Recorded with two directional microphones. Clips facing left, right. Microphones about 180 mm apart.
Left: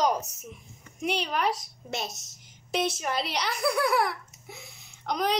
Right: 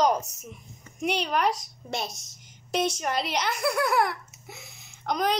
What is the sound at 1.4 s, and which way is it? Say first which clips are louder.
A woman's voice: right 2 dB; 5° left (ahead or behind).